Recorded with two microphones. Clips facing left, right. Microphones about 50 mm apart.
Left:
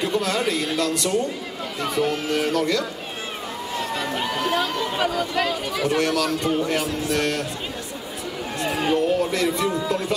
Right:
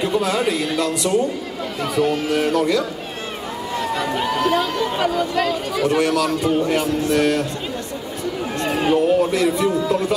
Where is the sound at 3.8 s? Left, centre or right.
Centre.